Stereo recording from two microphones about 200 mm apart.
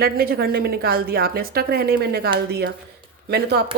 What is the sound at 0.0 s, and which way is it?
Speech, 50° right (ahead or behind).